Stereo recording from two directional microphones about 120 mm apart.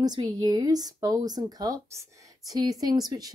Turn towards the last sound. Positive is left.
turn(degrees=-30)  # may be behind; listen again after turning